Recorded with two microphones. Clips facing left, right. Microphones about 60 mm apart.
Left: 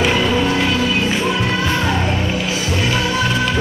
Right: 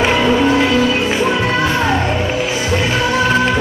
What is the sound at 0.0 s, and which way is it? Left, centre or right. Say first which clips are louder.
Music: right 3 dB; right.